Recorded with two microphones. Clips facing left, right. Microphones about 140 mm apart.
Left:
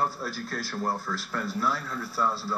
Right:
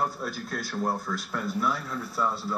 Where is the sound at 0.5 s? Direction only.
Centre (ahead or behind).